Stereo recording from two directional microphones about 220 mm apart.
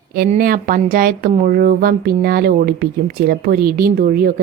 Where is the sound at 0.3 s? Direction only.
40° right (ahead or behind).